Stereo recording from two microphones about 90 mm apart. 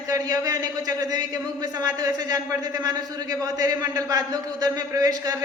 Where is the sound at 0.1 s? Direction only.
45° right (ahead or behind).